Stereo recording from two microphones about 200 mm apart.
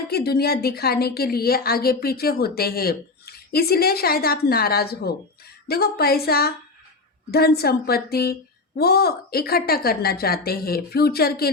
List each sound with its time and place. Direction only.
0.1 s a woman's voice: 50° left (ahead or behind)